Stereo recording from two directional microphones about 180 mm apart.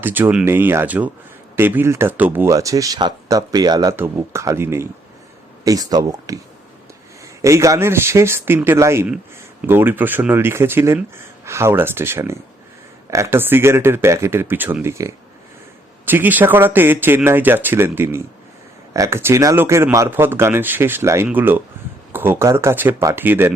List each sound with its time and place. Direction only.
0.0 s speech: 10° right (ahead or behind)
7.4 s speech: 15° right (ahead or behind)